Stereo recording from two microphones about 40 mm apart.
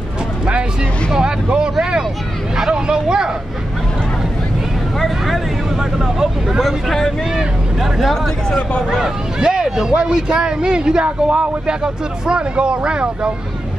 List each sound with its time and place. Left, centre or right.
1.1 s vehicle: right
4.9 s vehicle: centre
5.8 s speech: centre
6.6 s speech: centre
8.5 s speech: left
8.9 s speech: centre